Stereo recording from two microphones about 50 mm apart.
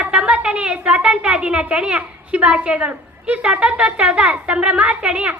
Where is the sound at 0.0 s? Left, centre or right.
Centre.